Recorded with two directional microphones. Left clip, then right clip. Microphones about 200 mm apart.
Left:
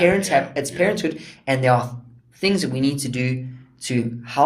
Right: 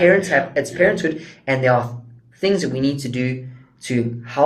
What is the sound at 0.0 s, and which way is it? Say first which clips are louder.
Speech: right 3 dB; 25° left (ahead or behind).